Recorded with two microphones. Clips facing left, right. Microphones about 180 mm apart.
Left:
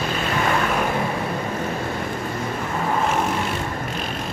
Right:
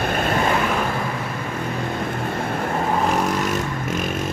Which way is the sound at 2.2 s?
60° right (ahead or behind).